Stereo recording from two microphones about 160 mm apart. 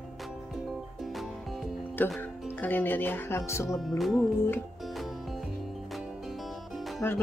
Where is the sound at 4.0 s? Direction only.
Centre (ahead or behind).